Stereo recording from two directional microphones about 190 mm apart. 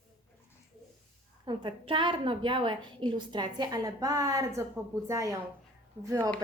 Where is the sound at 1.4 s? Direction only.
25° right (ahead or behind).